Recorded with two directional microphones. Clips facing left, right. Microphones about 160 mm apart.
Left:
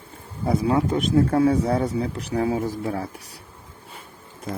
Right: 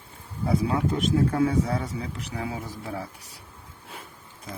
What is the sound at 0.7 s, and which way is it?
Speech, 40° left (ahead or behind).